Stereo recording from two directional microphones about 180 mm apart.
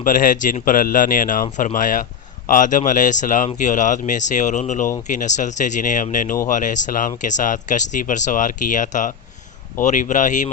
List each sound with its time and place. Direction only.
0.0 s speech: 50° left (ahead or behind)